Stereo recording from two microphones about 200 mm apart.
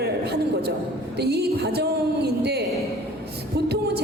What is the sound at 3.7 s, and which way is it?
Singing, 55° right (ahead or behind).